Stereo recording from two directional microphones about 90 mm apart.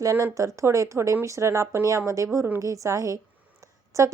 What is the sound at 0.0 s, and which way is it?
A woman's voice, 35° right (ahead or behind).